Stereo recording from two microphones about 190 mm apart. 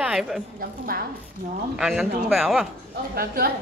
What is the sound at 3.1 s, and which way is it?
Speech, 50° right (ahead or behind).